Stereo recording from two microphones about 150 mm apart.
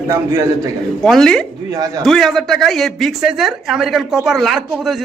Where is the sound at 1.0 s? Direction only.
Centre (ahead or behind).